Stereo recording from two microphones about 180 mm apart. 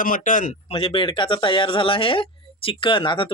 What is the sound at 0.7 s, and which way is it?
Speech, 30° left (ahead or behind).